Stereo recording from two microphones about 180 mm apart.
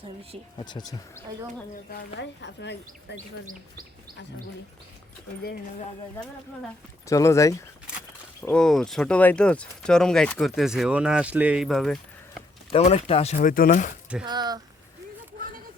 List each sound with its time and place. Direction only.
2.1 s speech: 75° left (ahead or behind)
7.1 s speech: 15° left (ahead or behind)
8.4 s speech: 5° left (ahead or behind)
12.7 s speech: 35° left (ahead or behind)
14.3 s speech: 25° right (ahead or behind)